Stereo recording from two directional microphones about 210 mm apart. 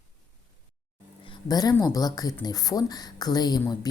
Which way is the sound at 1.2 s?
20° left (ahead or behind).